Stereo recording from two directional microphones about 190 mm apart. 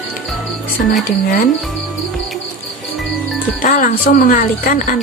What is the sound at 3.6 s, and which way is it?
A woman's voice, 45° left (ahead or behind).